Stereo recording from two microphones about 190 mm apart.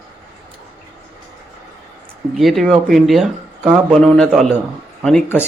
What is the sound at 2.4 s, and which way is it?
Speech, centre (ahead or behind).